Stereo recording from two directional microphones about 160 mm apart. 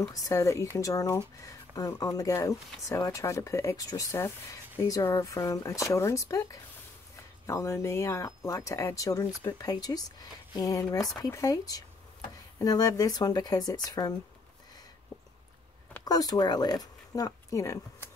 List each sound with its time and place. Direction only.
0.1 s speech: 20° left (ahead or behind)
16.1 s speech: 25° left (ahead or behind)